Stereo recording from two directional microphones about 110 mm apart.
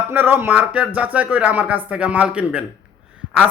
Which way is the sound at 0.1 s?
20° right (ahead or behind).